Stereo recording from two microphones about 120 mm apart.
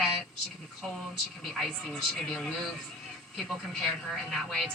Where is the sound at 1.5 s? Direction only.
5° left (ahead or behind).